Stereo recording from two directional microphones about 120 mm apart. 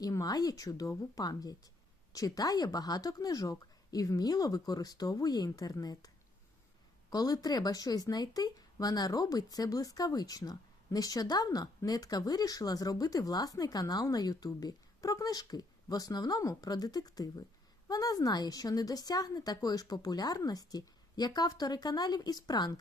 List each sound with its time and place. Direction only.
0.0 s speech: 30° left (ahead or behind)
7.1 s speech: 35° left (ahead or behind)